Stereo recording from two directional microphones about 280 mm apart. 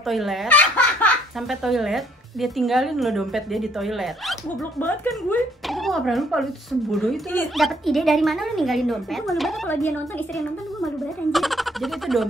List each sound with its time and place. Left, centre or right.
0.0 s speech: centre
11.3 s speech: centre